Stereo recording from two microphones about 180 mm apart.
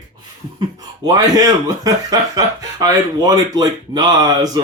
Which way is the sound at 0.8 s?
20° right (ahead or behind).